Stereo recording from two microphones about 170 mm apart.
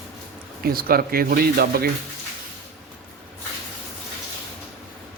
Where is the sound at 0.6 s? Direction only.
60° right (ahead or behind).